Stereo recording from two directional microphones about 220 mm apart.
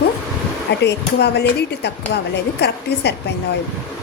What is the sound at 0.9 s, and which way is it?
A woman's voice, 50° left (ahead or behind).